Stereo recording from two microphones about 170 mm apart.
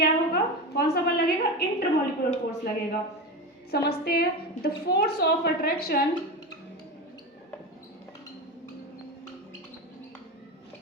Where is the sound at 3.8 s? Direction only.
65° left (ahead or behind).